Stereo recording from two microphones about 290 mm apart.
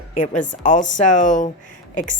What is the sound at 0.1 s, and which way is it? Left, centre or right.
A woman's voice, left.